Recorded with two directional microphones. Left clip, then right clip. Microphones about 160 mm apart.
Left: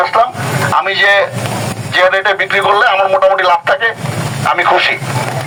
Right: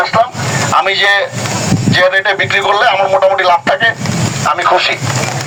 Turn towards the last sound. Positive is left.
turn(degrees=0)  # may be behind; listen again after turning